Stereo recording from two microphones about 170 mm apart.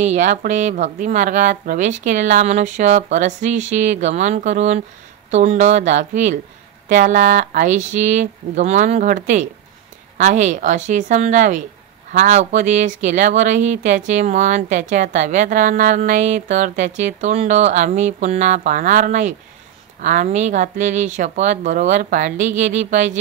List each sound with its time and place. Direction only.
0.0 s speech: 45° right (ahead or behind)